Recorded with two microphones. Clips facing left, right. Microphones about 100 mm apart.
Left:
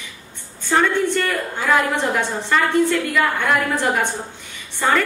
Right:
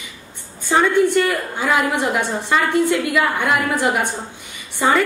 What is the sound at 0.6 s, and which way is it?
A woman's voice, 10° right (ahead or behind).